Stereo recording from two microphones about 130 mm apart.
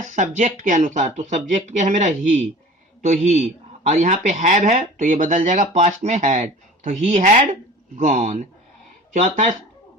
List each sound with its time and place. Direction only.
0.0 s speech: 70° right (ahead or behind); by 3.4 s 55° right (ahead or behind)
3.8 s speech: 65° right (ahead or behind)